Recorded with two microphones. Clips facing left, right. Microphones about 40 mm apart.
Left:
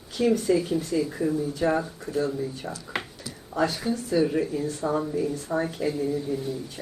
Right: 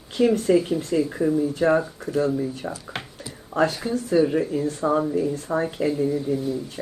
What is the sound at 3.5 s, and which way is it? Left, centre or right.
Speech, right.